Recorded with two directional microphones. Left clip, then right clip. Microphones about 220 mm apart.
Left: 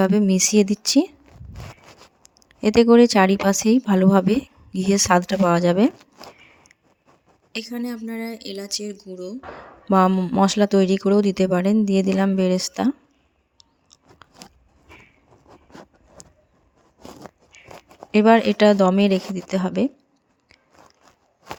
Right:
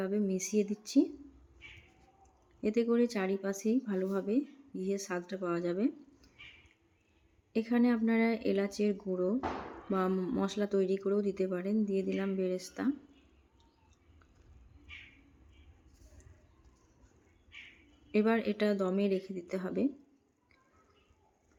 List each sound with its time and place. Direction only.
0.0 s a woman's voice: 55° left (ahead or behind)
2.6 s a woman's voice: 50° left (ahead or behind)
7.6 s speech: centre (ahead or behind)
9.9 s a woman's voice: 45° left (ahead or behind)
18.1 s a woman's voice: 45° left (ahead or behind)